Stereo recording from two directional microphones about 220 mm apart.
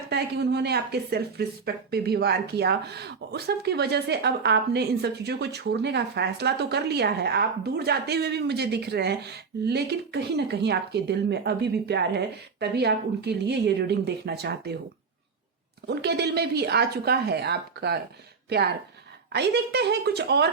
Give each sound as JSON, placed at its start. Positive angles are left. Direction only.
{"t": 0.1, "sound": "speech", "side_deg": -50}
{"t": 15.9, "sound": "speech", "side_deg": -50}